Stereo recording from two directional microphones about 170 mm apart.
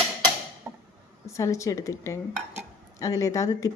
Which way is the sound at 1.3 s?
15° left (ahead or behind).